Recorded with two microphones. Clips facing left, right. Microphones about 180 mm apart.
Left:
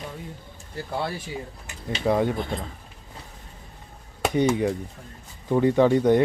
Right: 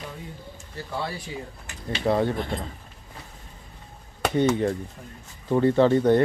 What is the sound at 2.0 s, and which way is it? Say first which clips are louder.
Speech: left 1 dB; 15° left (ahead or behind).